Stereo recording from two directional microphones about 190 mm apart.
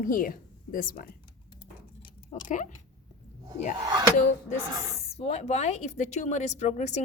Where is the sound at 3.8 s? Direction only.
15° right (ahead or behind).